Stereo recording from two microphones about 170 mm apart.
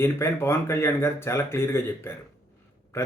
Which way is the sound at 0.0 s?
15° left (ahead or behind).